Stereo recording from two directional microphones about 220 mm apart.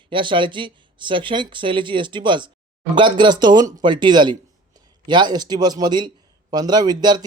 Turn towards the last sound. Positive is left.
turn(degrees=-20)  # may be behind; listen again after turning